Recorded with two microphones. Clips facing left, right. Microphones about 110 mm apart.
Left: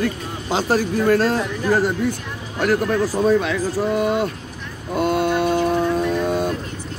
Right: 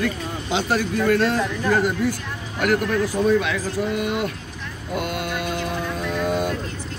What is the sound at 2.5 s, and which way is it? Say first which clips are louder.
Speech: left 2 dB; 35° left (ahead or behind).